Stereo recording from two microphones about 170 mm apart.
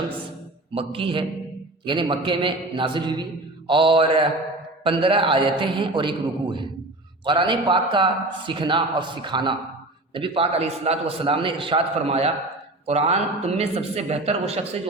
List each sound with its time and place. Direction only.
0.7 s a man's voice: 30° right (ahead or behind)